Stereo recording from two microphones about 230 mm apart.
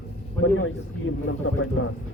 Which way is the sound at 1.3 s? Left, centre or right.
Left.